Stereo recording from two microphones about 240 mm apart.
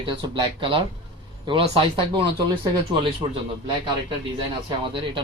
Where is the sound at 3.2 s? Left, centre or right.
Centre.